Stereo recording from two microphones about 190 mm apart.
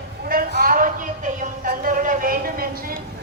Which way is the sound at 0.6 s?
45° right (ahead or behind).